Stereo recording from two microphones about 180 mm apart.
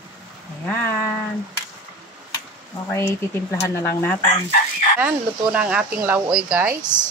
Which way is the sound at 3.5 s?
15° left (ahead or behind).